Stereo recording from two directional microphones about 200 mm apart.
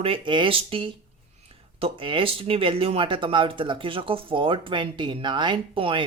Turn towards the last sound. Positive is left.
turn(degrees=-25)  # may be behind; listen again after turning